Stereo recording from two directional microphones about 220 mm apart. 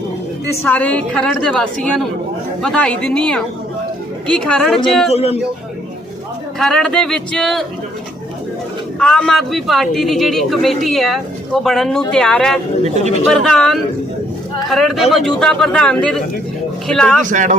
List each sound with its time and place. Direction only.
0.6 s a man's voice: 5° left (ahead or behind)
5.1 s speech: 25° left (ahead or behind)
6.6 s a man's voice: 5° left (ahead or behind)
9.0 s a man's voice: 5° left (ahead or behind)
12.8 s speech: 30° right (ahead or behind)
13.3 s a man's voice: centre (ahead or behind)
17.2 s speech: 35° right (ahead or behind)